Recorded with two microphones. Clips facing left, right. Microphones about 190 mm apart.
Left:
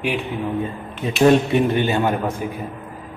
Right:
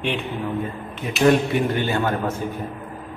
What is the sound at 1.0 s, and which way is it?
A man's voice, 25° left (ahead or behind).